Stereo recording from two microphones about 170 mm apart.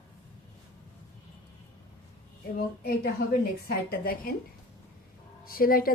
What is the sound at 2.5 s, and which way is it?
A woman's voice, 55° left (ahead or behind).